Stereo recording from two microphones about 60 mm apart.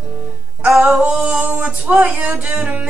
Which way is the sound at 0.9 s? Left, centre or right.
Centre.